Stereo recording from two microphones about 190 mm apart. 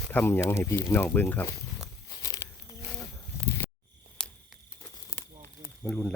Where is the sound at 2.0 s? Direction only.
20° left (ahead or behind).